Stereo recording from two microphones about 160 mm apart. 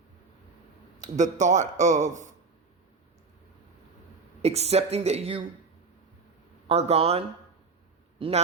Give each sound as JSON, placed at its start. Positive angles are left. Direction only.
{"t": 0.9, "sound": "a man's voice", "side_deg": -50}
{"t": 4.4, "sound": "speech", "side_deg": -40}
{"t": 6.7, "sound": "speech", "side_deg": -40}